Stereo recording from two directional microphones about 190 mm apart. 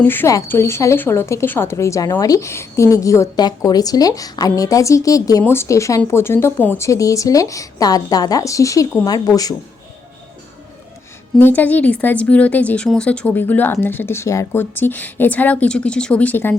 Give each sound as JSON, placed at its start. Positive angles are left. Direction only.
{"t": 0.0, "sound": "a woman's voice", "side_deg": 10}
{"t": 11.3, "sound": "a woman's voice", "side_deg": 10}